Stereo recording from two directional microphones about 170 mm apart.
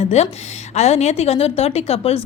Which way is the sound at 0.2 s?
40° left (ahead or behind).